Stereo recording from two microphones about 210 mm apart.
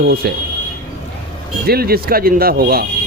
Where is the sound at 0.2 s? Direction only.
50° right (ahead or behind).